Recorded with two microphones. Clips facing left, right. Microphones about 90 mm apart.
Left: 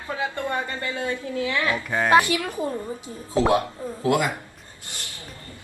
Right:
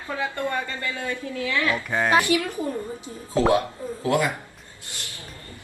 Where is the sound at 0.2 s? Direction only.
20° left (ahead or behind).